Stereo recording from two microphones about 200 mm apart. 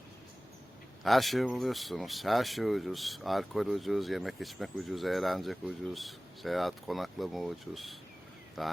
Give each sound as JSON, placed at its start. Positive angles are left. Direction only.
{"t": 1.0, "sound": "speech", "side_deg": 0}